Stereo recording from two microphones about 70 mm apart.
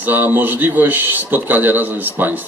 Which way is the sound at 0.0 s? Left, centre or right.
Right.